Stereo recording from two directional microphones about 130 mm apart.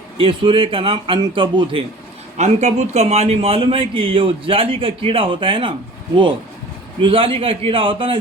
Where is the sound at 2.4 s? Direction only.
60° right (ahead or behind); by 5.7 s 40° right (ahead or behind).